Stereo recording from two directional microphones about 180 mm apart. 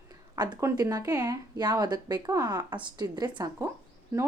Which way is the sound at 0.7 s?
20° right (ahead or behind).